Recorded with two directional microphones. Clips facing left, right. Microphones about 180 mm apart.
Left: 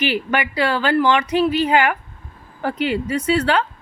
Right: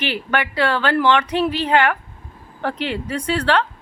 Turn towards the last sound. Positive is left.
turn(degrees=5)  # may be behind; listen again after turning